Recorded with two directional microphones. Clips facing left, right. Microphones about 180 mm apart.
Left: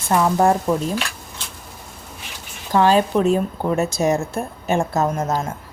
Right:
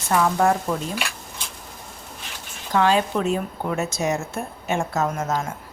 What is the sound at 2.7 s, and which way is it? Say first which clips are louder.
A woman's voice: left 4 dB; 35° left (ahead or behind).